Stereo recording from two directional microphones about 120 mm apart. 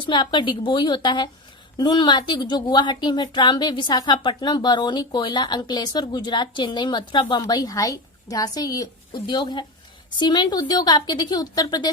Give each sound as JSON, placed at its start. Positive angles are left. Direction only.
{"t": 0.0, "sound": "a woman's voice", "side_deg": 40}